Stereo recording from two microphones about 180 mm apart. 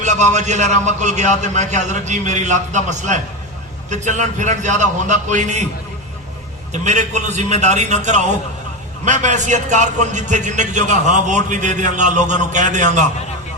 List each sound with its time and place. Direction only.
0.0 s a man's voice: 40° right (ahead or behind)
6.8 s a man's voice: 40° right (ahead or behind)